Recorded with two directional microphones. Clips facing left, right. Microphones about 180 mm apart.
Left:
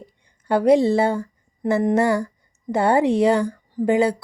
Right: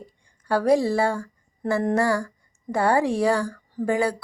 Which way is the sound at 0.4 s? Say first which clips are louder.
Left 4 dB; 20° left (ahead or behind).